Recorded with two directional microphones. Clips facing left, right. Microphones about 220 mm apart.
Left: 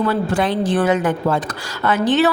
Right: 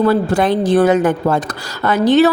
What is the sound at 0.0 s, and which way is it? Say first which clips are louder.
A woman's voice: right 5 dB; 40° right (ahead or behind).